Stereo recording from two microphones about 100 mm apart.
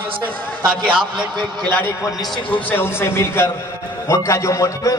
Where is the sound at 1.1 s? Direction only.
50° right (ahead or behind).